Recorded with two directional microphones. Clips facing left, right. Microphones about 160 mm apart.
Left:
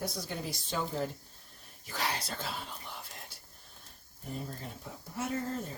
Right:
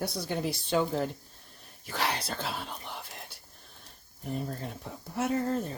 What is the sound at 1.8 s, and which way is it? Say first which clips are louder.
Speech: right 4 dB; 70° right (ahead or behind).